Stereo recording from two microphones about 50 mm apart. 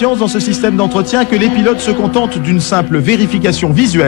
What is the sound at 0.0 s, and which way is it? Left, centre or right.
A man's voice, centre.